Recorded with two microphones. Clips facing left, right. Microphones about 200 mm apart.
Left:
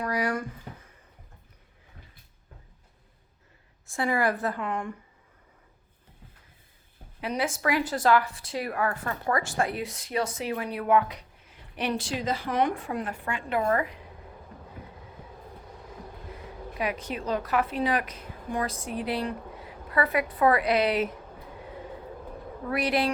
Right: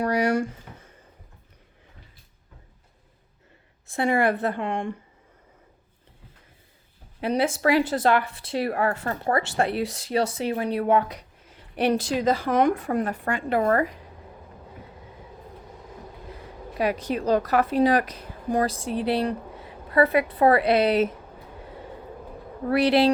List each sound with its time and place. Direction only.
0.0 s a sound: 25° right (ahead or behind)
0.3 s speech: 85° right
3.9 s a woman's voice: 25° right (ahead or behind)
7.2 s a woman's voice: 30° right (ahead or behind)
8.2 s speech: 60° right (ahead or behind)
8.5 s a woman's voice: 30° right (ahead or behind)
11.8 s a woman's voice: 40° right (ahead or behind)
16.7 s a woman's voice: 35° right (ahead or behind)
22.6 s a woman's voice: 30° right (ahead or behind)